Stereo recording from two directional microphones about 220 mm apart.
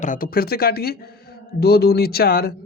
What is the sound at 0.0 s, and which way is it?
Speech, 40° left (ahead or behind).